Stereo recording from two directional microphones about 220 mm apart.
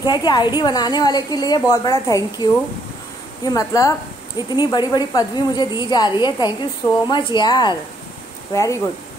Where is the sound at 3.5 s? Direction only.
15° left (ahead or behind).